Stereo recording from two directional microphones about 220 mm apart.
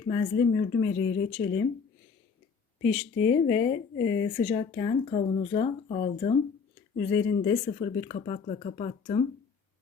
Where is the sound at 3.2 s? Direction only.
15° left (ahead or behind).